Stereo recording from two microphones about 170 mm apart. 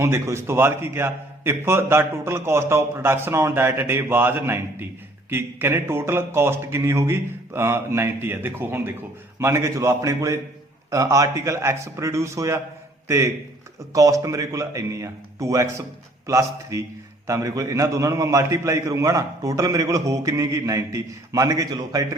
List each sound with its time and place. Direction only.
0.0 s a man's voice: 15° right (ahead or behind)